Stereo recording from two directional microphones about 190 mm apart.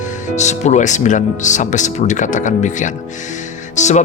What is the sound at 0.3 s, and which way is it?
Speech, 40° left (ahead or behind).